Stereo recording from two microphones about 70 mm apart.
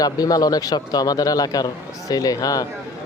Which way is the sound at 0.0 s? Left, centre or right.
Left.